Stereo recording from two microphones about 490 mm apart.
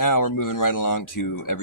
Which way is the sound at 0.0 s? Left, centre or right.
Left.